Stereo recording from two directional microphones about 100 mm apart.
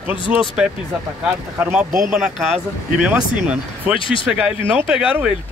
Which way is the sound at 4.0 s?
60° left (ahead or behind).